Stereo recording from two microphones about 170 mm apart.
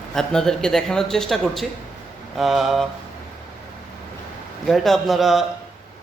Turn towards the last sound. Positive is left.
turn(degrees=0)  # may be behind; listen again after turning